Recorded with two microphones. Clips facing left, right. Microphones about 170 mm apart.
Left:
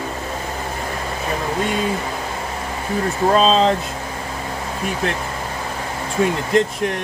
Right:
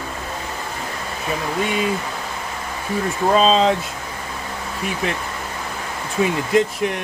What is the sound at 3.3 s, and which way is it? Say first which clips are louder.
Speech: even; 5° right (ahead or behind).